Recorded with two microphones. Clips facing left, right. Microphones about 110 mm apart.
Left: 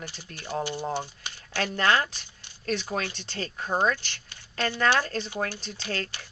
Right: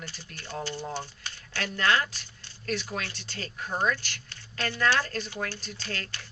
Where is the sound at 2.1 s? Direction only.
15° left (ahead or behind).